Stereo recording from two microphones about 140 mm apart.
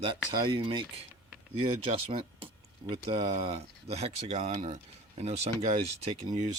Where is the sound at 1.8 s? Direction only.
40° right (ahead or behind).